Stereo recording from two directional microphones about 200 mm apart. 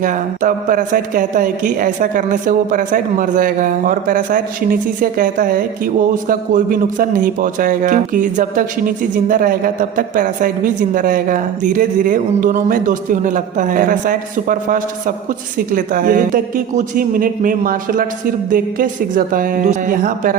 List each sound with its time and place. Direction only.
0.0 s speech: 40° right (ahead or behind)